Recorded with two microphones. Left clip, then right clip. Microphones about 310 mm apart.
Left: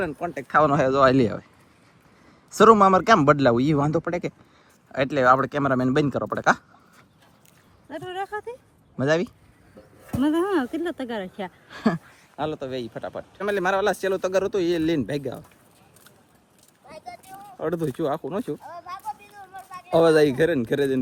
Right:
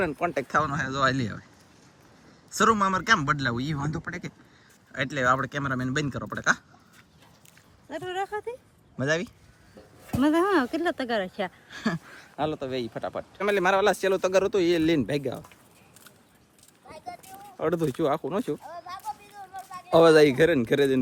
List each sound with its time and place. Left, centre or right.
0.0 s speech: centre
2.5 s speech: centre
7.9 s speech: centre
17.2 s speech: centre
18.7 s a sound: left
19.9 s speech: centre